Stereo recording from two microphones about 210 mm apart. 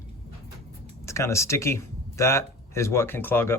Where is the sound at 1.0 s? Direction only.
15° left (ahead or behind).